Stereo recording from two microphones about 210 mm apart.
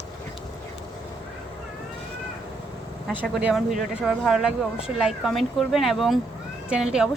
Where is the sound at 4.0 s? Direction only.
Centre (ahead or behind).